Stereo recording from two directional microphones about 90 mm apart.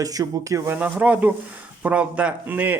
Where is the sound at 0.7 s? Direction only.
15° right (ahead or behind).